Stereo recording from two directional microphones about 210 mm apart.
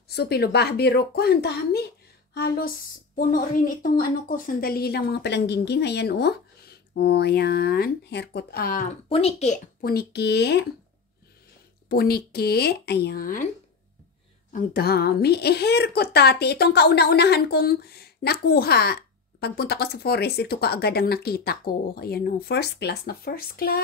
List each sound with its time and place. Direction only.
0.1 s a woman's voice: 50° left (ahead or behind)
9.1 s a woman's voice: 30° left (ahead or behind); by 10.7 s 50° left (ahead or behind)
11.9 s a woman's voice: 45° left (ahead or behind)
14.5 s a woman's voice: 45° left (ahead or behind)